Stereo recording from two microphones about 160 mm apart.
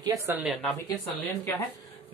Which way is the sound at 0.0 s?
20° right (ahead or behind).